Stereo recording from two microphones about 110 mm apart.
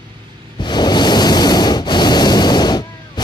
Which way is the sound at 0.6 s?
40° left (ahead or behind).